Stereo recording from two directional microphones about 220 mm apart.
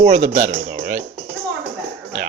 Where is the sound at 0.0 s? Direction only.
35° right (ahead or behind).